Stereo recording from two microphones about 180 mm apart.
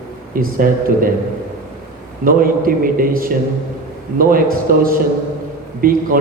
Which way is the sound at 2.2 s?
50° right (ahead or behind).